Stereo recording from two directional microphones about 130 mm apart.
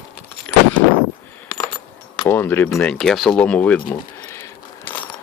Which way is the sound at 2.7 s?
5° left (ahead or behind).